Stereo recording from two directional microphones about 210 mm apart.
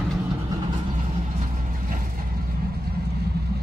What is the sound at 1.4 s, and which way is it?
Vehicle, 40° right (ahead or behind).